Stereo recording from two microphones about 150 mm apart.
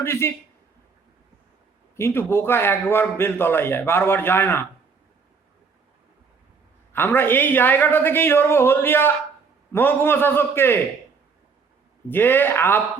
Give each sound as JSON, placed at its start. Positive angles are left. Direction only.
{"t": 0.0, "sound": "a man's voice", "side_deg": 15}
{"t": 2.0, "sound": "a man's voice", "side_deg": 15}
{"t": 6.9, "sound": "a man's voice", "side_deg": 15}
{"t": 12.0, "sound": "a man's voice", "side_deg": 15}